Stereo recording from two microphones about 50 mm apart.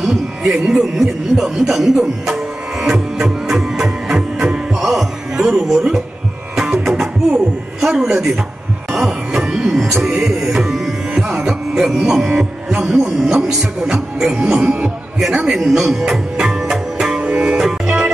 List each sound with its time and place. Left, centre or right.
0.0 s a man's voice: centre
2.9 s music: centre
5.5 s speech: centre
6.5 s music: centre
8.9 s cough: centre
10.0 s tabla: centre
12.8 s speech: centre
15.1 s music: centre
17.2 s music: centre
17.8 s music: right